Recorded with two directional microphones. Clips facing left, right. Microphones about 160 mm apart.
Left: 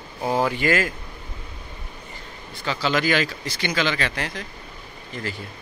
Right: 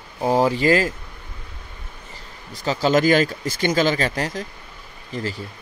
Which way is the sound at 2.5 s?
40° right (ahead or behind).